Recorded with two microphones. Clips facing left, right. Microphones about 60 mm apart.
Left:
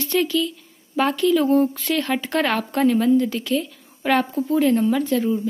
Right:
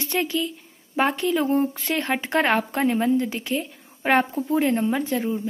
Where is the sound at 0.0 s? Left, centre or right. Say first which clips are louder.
Left 4 dB; right.